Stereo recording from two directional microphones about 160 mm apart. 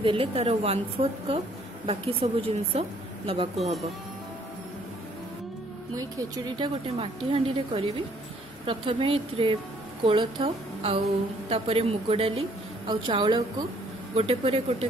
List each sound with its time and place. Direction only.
0.0 s a woman's voice: 35° right (ahead or behind)
5.9 s speech: 25° right (ahead or behind)
7.0 s a woman's voice: 35° right (ahead or behind)